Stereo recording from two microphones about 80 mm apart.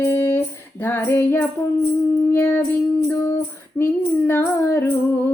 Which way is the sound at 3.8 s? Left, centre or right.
Left.